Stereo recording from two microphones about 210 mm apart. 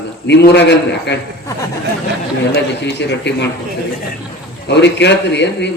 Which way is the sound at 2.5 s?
55° left (ahead or behind).